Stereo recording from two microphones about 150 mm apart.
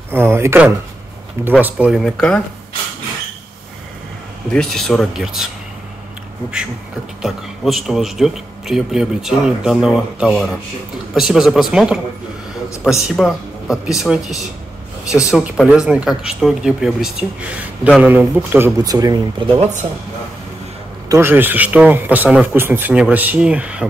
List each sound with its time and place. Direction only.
0.1 s speech: 15° right (ahead or behind)
1.6 s speech: 5° right (ahead or behind)
4.5 s speech: 5° left (ahead or behind)
7.2 s speech: centre (ahead or behind)
15.3 s speech: centre (ahead or behind); by 19.6 s 25° right (ahead or behind)
21.1 s speech: 15° right (ahead or behind)